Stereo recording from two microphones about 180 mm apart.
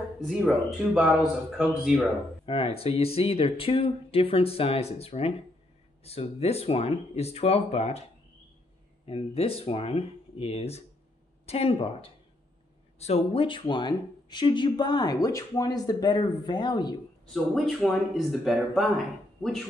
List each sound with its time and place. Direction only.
0.2 s speech: centre (ahead or behind)
2.4 s speech: 30° left (ahead or behind)
9.0 s speech: 35° left (ahead or behind)
17.3 s speech: centre (ahead or behind)